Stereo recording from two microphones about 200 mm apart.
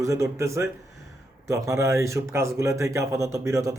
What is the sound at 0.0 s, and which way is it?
Speech, 15° right (ahead or behind).